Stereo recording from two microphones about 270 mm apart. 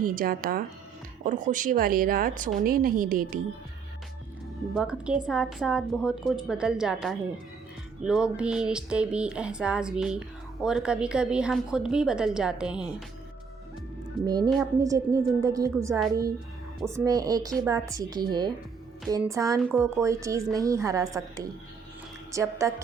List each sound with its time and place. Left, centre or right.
0.0 s a woman's voice: right
4.7 s speech: centre
14.3 s a woman's voice: centre